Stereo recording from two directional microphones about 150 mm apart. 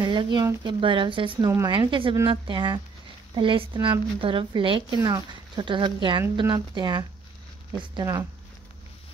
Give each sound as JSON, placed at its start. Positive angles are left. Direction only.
{"t": 0.0, "sound": "a woman's voice", "side_deg": -30}